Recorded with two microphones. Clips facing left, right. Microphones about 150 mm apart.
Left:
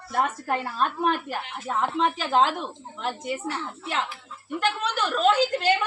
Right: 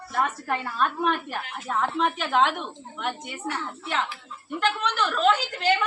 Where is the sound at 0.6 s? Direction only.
30° left (ahead or behind).